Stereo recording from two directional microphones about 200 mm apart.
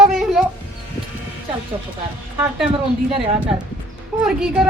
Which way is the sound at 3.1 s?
30° right (ahead or behind).